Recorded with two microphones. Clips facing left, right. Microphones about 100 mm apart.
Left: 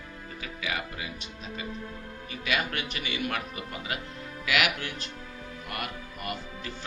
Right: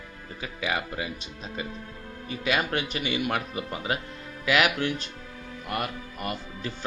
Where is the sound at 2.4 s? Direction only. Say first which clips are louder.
Right 4 dB; 30° right (ahead or behind).